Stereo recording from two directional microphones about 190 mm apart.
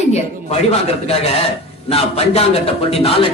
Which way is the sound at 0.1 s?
35° left (ahead or behind).